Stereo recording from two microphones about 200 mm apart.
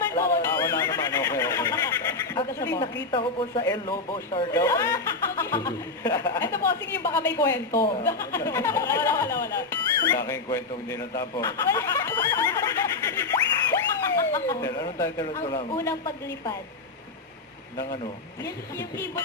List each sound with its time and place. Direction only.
0.1 s a sound: 15° left (ahead or behind)
4.6 s speech: 15° left (ahead or behind)
11.1 s snicker: 15° left (ahead or behind)
14.2 s speech: 15° left (ahead or behind)
18.4 s a woman's voice: 20° left (ahead or behind)